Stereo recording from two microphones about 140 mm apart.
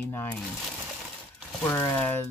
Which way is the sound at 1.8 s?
15° left (ahead or behind).